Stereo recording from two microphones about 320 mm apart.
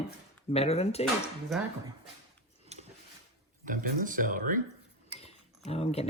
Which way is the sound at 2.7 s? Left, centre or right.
Centre.